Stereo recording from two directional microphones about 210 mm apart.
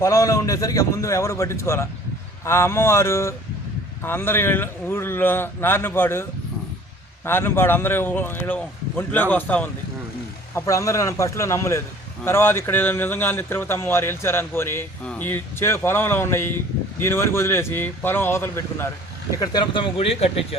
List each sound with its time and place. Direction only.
0.0 s a man's voice: 15° left (ahead or behind)
7.3 s a man's voice: 10° left (ahead or behind); by 20.6 s 25° left (ahead or behind)